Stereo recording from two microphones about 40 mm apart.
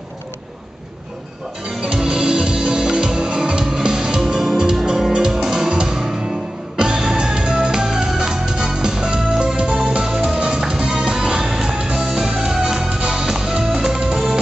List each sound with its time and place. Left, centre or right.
1.8 s music: right